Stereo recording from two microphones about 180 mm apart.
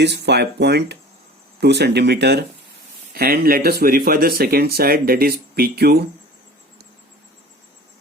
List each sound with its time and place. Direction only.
0.0 s speech: 70° right (ahead or behind)